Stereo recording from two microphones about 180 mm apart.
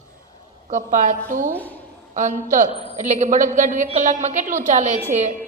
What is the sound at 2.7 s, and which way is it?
Speech, 30° left (ahead or behind).